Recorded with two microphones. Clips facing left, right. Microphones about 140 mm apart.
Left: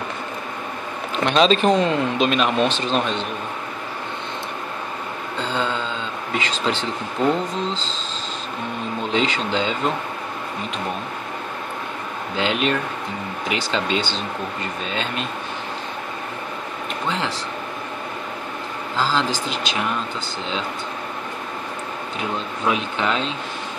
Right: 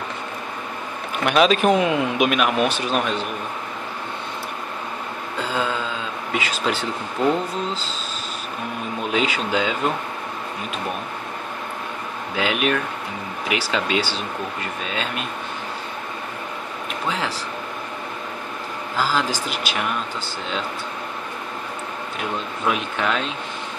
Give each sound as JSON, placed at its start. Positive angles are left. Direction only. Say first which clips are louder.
{"t": 1.1, "sound": "speech", "louder": "even", "side_deg": -10}
{"t": 5.4, "sound": "a sound", "louder": "even", "side_deg": -5}
{"t": 6.3, "sound": "speech", "louder": "even", "side_deg": -10}
{"t": 9.1, "sound": "speech", "louder": "even", "side_deg": -5}
{"t": 12.4, "sound": "speech", "louder": "even", "side_deg": -5}
{"t": 18.9, "sound": "speech", "louder": "left 1 dB", "side_deg": -10}
{"t": 22.7, "sound": "speech", "louder": "left 1 dB", "side_deg": -5}